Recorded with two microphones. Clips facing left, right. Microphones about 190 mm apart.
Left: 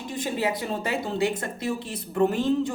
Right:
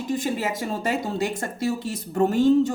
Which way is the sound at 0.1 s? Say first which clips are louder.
Right 1 dB; 45° right (ahead or behind).